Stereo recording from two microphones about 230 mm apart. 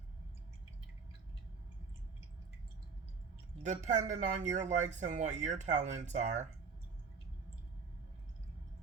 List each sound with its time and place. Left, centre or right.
3.6 s speech: right